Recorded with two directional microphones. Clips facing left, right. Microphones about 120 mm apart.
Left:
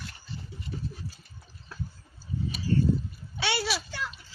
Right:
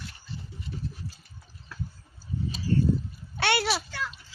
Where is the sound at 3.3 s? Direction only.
60° right (ahead or behind).